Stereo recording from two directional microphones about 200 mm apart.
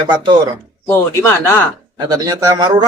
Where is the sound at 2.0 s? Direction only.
20° right (ahead or behind).